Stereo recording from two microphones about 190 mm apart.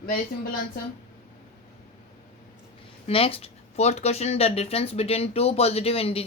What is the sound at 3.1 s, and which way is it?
Speech, 30° left (ahead or behind).